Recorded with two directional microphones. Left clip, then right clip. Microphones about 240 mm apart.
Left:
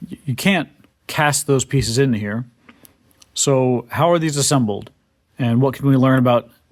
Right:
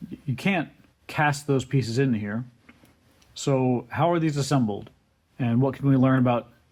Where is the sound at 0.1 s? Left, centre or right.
Left.